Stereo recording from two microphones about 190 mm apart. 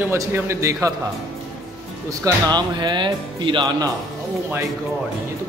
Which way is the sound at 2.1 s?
20° right (ahead or behind).